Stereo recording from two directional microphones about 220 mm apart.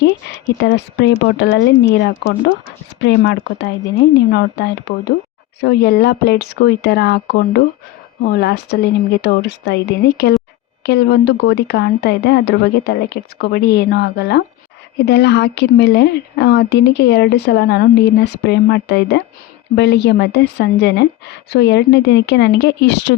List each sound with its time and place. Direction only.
0.6 s a woman's voice: 50° left (ahead or behind)
3.0 s a woman's voice: 50° left (ahead or behind)